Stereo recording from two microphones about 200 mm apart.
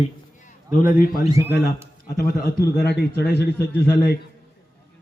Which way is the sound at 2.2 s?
50° left (ahead or behind).